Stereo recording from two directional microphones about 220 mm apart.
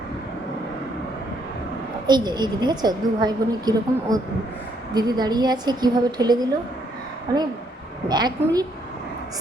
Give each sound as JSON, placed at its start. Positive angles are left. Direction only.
{"t": 2.0, "sound": "a woman's voice", "side_deg": -20}